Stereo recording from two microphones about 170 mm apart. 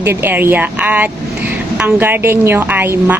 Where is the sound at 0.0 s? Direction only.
15° right (ahead or behind).